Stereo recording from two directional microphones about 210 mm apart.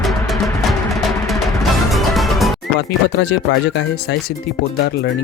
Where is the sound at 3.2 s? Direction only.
55° left (ahead or behind).